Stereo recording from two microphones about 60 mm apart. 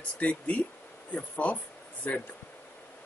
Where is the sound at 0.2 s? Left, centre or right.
Left.